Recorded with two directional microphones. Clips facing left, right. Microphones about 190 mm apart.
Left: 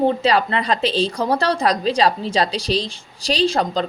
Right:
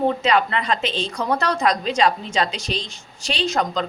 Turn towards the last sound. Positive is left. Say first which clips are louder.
# left 3 dB
turn(degrees=30)  # may be behind; listen again after turning